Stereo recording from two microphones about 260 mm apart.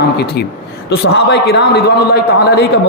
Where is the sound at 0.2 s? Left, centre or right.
Left.